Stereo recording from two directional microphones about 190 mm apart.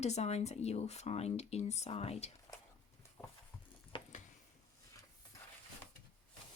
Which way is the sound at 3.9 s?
25° left (ahead or behind).